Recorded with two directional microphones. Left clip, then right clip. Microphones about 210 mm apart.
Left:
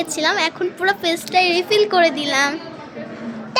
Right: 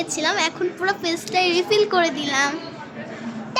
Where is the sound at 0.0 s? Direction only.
15° left (ahead or behind).